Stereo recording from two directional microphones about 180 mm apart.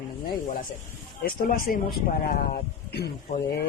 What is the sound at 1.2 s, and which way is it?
Speech, 55° left (ahead or behind).